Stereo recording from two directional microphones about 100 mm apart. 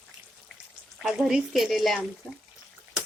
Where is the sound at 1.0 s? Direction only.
5° right (ahead or behind).